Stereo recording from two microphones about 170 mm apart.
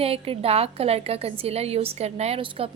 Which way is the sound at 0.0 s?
35° right (ahead or behind).